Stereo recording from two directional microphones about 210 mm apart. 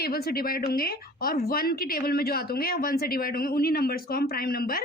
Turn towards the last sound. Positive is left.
turn(degrees=45)  # may be behind; listen again after turning